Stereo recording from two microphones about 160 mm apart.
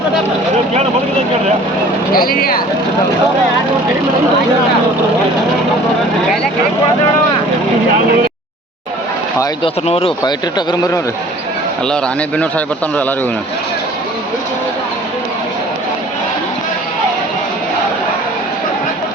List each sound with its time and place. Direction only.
2.1 s speech: 65° left (ahead or behind)
9.6 s speech: 35° left (ahead or behind)
10.2 s speech: 25° left (ahead or behind)
12.4 s a man's voice: 10° left (ahead or behind)